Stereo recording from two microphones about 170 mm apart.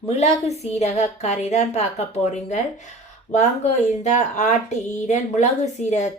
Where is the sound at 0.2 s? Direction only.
40° left (ahead or behind).